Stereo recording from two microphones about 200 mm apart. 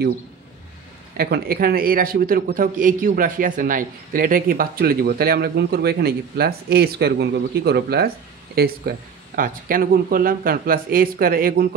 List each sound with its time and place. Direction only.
1.1 s a man's voice: 50° right (ahead or behind)